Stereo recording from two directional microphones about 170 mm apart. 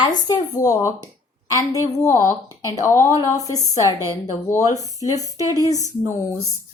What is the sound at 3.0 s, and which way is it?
Speech, 20° right (ahead or behind).